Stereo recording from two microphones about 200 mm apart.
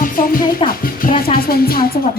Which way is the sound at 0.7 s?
45° left (ahead or behind).